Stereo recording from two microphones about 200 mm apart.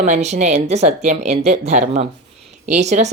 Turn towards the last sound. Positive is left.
turn(degrees=-35)  # may be behind; listen again after turning